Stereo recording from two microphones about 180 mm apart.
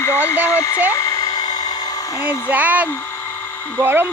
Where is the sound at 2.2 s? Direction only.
10° right (ahead or behind).